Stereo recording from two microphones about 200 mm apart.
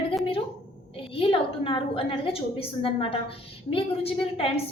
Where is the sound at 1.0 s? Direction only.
25° left (ahead or behind).